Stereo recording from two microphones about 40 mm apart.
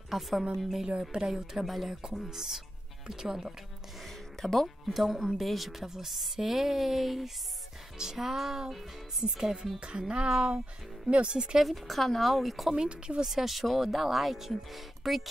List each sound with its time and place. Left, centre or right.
0.1 s a woman's voice: centre
2.0 s speech: centre
4.0 s music: centre
4.8 s a woman's voice: centre
9.2 s speech: centre
10.2 s speech: centre
11.1 s speech: right
11.5 s a woman's voice: centre
12.7 s speech: right
13.2 s a woman's voice: centre